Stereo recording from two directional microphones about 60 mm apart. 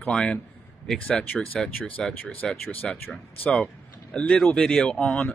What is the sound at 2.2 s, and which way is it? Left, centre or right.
Speech, left.